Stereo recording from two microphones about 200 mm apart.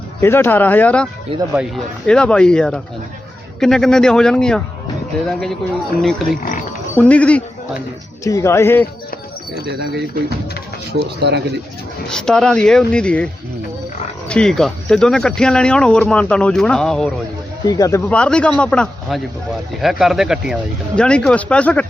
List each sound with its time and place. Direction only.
0.2 s speech: 10° left (ahead or behind)
6.9 s speech: 5° left (ahead or behind)
9.6 s speech: 55° right (ahead or behind)
12.0 s speech: 5° left (ahead or behind)
14.3 s speech: 5° left (ahead or behind)
17.7 s speech: 15° left (ahead or behind)